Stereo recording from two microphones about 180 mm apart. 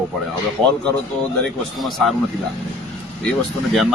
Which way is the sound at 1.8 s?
Centre (ahead or behind).